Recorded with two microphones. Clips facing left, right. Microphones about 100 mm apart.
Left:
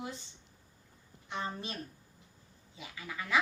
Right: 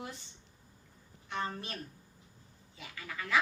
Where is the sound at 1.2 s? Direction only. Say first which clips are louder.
Right 1 dB; 15° left (ahead or behind).